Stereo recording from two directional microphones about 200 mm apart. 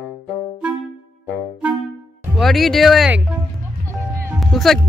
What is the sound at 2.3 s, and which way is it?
Speech, centre (ahead or behind).